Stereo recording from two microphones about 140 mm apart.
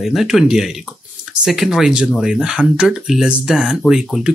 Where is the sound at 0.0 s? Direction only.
Centre (ahead or behind).